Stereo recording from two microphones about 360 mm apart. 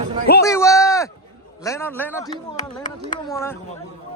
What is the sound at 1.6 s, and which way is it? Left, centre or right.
A man's voice, centre.